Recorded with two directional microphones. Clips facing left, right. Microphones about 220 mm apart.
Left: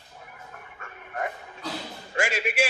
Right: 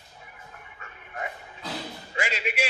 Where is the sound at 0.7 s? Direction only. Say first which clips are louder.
Left 4 dB; 50° left (ahead or behind).